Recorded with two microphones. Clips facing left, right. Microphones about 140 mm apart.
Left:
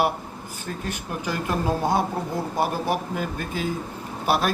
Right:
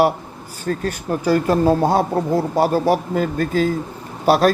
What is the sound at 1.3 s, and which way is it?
Speech, 35° right (ahead or behind).